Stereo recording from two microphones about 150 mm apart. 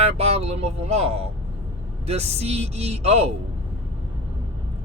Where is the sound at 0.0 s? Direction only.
45° right (ahead or behind).